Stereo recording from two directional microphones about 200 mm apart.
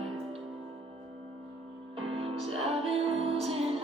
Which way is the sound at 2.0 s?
30° right (ahead or behind).